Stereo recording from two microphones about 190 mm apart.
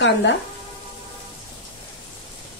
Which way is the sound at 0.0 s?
70° left (ahead or behind).